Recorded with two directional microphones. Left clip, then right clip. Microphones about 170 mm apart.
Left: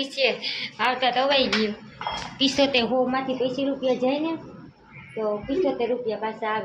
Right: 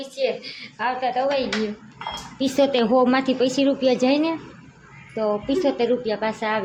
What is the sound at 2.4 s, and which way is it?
A woman's voice, 60° right (ahead or behind).